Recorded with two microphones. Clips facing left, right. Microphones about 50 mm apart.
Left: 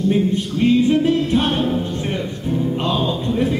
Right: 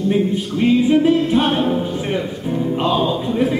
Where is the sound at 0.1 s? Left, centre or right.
Centre.